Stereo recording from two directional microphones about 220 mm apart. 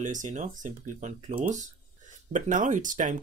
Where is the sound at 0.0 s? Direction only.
35° right (ahead or behind).